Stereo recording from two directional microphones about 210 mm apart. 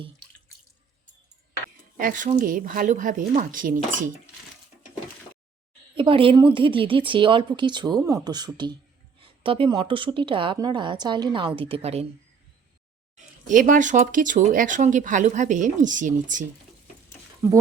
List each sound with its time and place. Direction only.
2.0 s speech: 40° right (ahead or behind)
5.9 s a woman's voice: 25° right (ahead or behind)
13.1 s speech: 40° right (ahead or behind)
17.4 s speech: 10° right (ahead or behind)